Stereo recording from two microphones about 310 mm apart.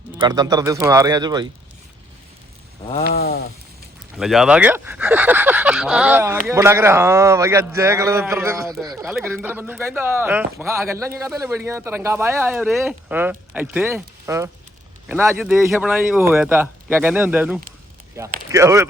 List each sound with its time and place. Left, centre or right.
0.2 s a man's voice: centre
2.9 s a sound: left
4.2 s a man's voice: centre